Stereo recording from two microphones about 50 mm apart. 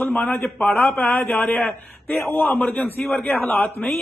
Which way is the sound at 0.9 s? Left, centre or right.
Left.